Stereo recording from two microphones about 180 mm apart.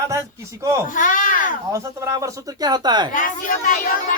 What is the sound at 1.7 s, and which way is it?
Speech, 15° right (ahead or behind).